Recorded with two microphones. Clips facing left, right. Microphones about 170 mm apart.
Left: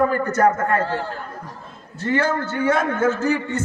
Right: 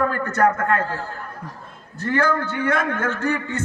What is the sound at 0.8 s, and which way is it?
Speech, 75° left (ahead or behind).